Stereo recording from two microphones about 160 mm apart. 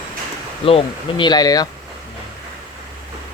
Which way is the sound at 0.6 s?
35° left (ahead or behind).